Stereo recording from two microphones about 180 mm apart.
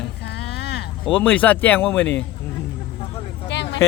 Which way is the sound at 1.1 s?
10° left (ahead or behind).